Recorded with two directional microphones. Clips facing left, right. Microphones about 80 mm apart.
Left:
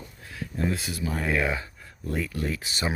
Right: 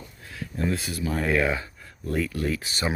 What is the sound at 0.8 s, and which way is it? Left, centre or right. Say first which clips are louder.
Speech: right 2 dB; centre.